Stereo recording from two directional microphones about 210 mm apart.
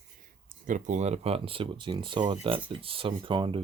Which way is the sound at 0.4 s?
35° right (ahead or behind).